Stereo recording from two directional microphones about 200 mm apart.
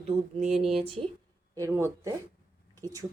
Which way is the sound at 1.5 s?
15° right (ahead or behind).